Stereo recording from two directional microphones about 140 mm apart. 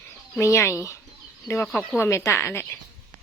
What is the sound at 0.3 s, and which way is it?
Speech, 20° left (ahead or behind).